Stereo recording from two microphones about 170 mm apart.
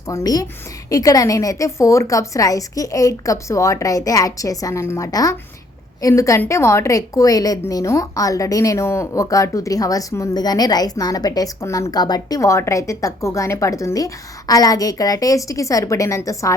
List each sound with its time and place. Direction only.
0.1 s a woman's voice: 20° left (ahead or behind)